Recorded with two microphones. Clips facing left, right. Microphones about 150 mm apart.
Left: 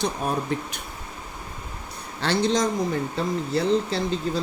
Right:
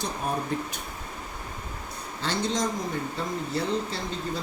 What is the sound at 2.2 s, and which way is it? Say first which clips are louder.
Speech: left 6 dB; 75° left (ahead or behind).